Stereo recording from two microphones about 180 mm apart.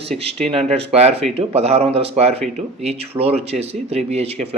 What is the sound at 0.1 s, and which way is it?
Speech, 45° right (ahead or behind).